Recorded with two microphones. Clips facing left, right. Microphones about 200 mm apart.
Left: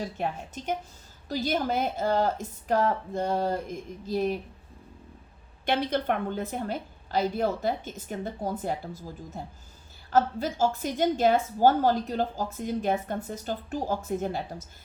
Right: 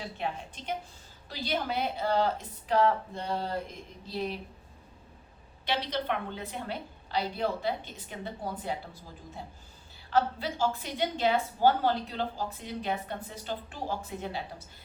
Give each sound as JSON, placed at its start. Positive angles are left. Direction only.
{"t": 0.2, "sound": "a woman's voice", "side_deg": 45}
{"t": 5.6, "sound": "a woman's voice", "side_deg": 50}